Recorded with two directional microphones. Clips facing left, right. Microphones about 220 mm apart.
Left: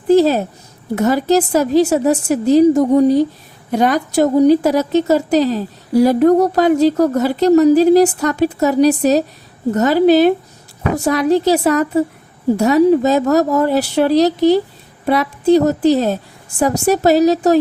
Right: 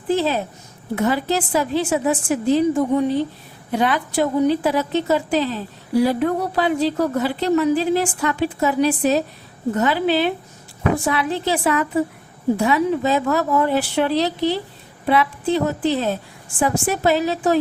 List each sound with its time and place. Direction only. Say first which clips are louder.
0.1 s a woman's voice: left 9 dB; 40° left (ahead or behind)